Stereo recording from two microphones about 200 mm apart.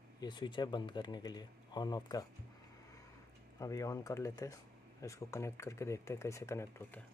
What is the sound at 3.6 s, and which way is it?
Speech, 15° left (ahead or behind).